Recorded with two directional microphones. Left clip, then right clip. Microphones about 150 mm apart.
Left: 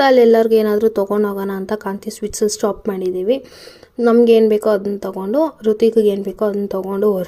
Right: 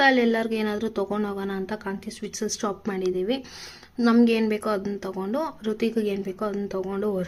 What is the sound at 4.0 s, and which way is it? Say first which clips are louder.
Speech: left 9 dB; 10° left (ahead or behind).